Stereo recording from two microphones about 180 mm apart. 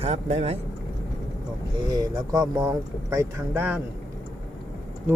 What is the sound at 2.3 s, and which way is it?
Speech, 20° right (ahead or behind).